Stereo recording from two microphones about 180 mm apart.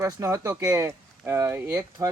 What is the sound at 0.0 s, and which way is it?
Speech, 15° right (ahead or behind).